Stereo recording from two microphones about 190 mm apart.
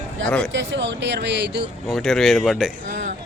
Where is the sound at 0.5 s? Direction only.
70° right (ahead or behind).